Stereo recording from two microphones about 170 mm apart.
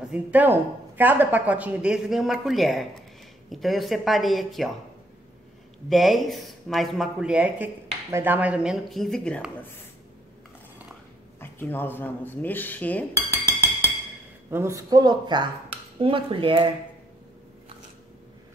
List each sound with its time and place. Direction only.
0.1 s speech: 10° right (ahead or behind)
5.9 s speech: centre (ahead or behind)
11.3 s speech: 15° left (ahead or behind)
14.5 s speech: 15° right (ahead or behind)